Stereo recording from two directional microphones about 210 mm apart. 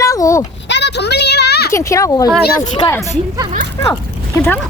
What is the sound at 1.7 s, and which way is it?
Speech, 15° left (ahead or behind).